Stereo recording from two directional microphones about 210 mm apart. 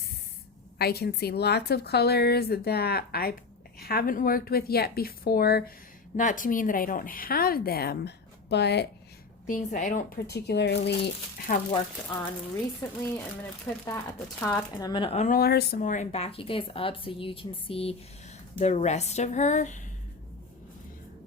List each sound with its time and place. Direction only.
0.8 s a woman's voice: 50° left (ahead or behind)
9.5 s a woman's voice: 35° left (ahead or behind)
12.8 s a woman's voice: 15° left (ahead or behind); by 15.4 s 30° left (ahead or behind)
15.4 s a woman's voice: 50° left (ahead or behind)